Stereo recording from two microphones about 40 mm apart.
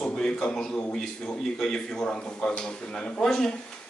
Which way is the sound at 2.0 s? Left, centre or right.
Left.